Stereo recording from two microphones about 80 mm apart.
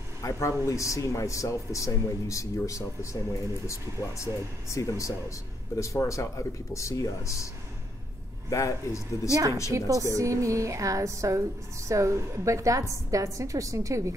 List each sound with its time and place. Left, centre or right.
0.2 s speech: left
8.5 s speech: left
9.7 s a woman's voice: right